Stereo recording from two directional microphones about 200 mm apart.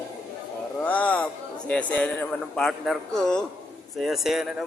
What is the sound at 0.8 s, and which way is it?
A man's voice, 5° left (ahead or behind).